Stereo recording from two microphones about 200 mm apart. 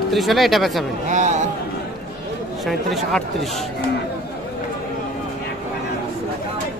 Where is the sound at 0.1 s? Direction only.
Centre (ahead or behind).